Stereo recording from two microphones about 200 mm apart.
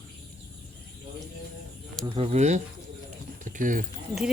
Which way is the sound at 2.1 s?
30° right (ahead or behind).